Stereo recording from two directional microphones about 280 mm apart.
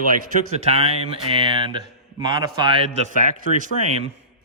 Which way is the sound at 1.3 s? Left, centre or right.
Centre.